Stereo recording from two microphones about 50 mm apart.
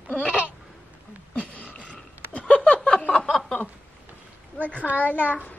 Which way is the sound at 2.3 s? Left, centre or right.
Left.